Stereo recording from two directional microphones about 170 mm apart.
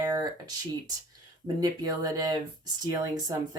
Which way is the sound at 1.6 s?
20° right (ahead or behind).